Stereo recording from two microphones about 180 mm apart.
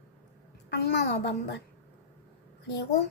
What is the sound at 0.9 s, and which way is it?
Speech, 70° left (ahead or behind).